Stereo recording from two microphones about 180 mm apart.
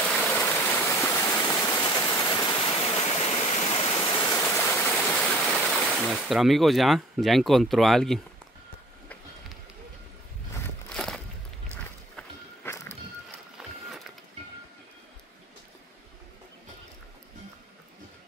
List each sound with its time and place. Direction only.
0.3 s stream: 15° left (ahead or behind)
4.3 s stream: 15° left (ahead or behind)
4.9 s speech: centre (ahead or behind)
10.9 s a sound: 5° left (ahead or behind)
12.2 s walk: 15° left (ahead or behind)
13.6 s a sound: centre (ahead or behind)